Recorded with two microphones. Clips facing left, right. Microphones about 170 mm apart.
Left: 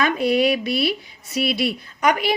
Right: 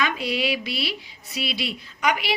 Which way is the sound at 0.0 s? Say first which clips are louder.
Left 7 dB; 50° left (ahead or behind).